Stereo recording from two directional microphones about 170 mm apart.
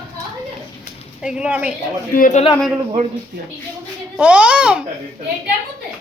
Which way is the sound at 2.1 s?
50° left (ahead or behind).